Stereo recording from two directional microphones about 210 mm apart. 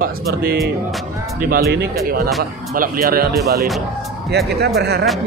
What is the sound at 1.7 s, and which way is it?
Speech, 45° right (ahead or behind).